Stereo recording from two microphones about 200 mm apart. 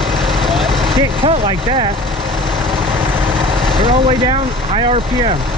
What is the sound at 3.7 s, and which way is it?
Speech, 25° right (ahead or behind).